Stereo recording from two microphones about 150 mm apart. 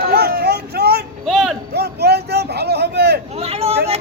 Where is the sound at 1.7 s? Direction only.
90° right.